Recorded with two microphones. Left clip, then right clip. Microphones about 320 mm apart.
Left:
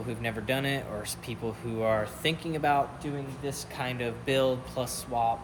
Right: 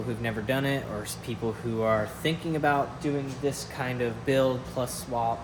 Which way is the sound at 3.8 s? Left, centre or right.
Centre.